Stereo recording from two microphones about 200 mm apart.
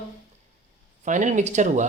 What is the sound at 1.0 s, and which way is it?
Speech, 40° right (ahead or behind).